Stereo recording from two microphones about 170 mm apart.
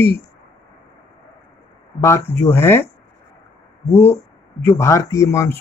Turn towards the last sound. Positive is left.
turn(degrees=15)  # may be behind; listen again after turning